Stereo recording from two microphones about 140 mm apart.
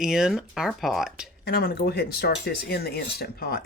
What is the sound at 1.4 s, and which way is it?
Speech, 90° left.